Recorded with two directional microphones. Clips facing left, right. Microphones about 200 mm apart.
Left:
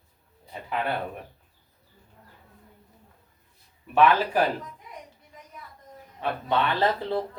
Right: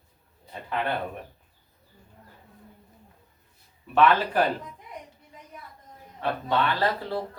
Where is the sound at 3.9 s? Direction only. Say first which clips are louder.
Left 1 dB; 10° left (ahead or behind).